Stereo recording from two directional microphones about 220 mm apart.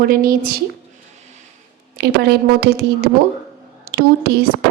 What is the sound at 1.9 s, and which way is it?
A woman's voice, 45° right (ahead or behind).